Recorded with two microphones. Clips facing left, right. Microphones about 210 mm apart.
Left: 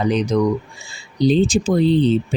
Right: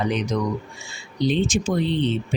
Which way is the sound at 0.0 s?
35° left (ahead or behind).